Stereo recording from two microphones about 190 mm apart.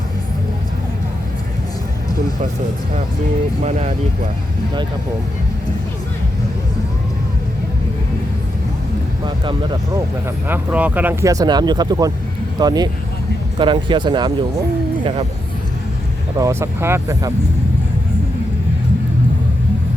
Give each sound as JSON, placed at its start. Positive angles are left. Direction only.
{"t": 3.6, "sound": "speech", "side_deg": -35}
{"t": 9.2, "sound": "speech", "side_deg": -25}
{"t": 10.5, "sound": "speech", "side_deg": -10}
{"t": 16.4, "sound": "speech", "side_deg": -15}